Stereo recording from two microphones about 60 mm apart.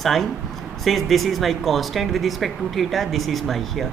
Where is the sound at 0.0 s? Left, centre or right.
Centre.